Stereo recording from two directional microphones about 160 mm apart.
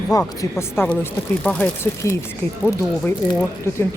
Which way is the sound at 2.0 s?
20° left (ahead or behind).